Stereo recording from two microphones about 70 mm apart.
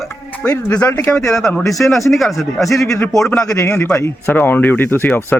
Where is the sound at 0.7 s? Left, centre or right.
Centre.